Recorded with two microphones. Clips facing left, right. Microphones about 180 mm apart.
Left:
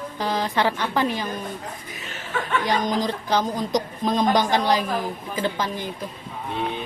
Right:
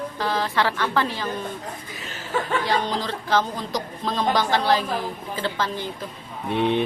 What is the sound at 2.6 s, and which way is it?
Speech, 15° left (ahead or behind).